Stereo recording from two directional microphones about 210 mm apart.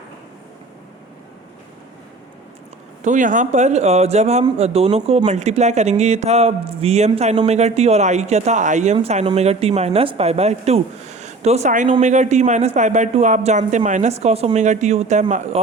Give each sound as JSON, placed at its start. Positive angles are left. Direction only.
{"t": 3.0, "sound": "speech", "side_deg": -35}